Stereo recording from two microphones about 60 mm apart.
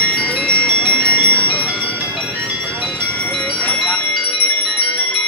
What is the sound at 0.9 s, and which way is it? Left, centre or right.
Bell, centre.